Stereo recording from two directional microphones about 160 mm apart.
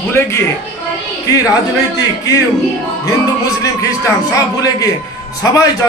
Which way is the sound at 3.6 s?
20° left (ahead or behind).